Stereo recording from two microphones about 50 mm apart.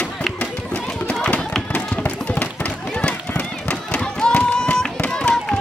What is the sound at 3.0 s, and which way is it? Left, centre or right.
Run, left.